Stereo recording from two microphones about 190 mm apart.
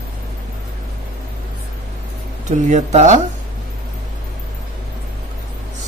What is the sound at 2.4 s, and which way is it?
Speech, 40° right (ahead or behind).